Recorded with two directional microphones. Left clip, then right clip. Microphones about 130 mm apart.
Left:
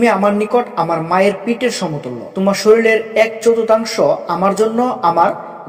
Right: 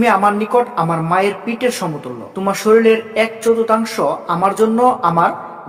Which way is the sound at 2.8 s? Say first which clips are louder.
Left 1 dB; 20° left (ahead or behind).